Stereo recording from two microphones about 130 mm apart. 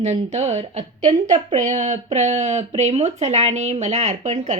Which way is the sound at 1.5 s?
70° right (ahead or behind).